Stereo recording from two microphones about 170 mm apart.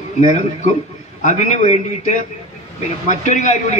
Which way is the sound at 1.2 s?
45° left (ahead or behind).